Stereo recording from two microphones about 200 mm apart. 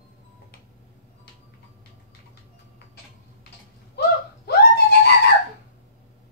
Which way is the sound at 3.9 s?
55° left (ahead or behind).